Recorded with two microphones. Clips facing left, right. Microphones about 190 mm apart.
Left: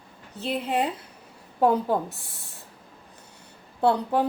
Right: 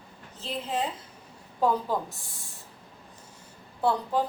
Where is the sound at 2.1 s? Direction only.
65° left (ahead or behind).